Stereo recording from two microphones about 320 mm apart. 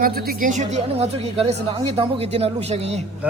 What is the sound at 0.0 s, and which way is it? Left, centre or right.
A man's voice, right.